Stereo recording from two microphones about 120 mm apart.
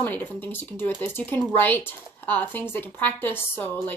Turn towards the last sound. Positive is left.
turn(degrees=15)  # may be behind; listen again after turning